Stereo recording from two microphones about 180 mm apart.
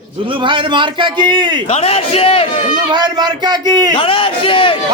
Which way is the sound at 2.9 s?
25° right (ahead or behind).